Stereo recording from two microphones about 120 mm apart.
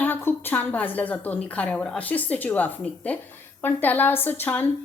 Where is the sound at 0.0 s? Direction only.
15° left (ahead or behind).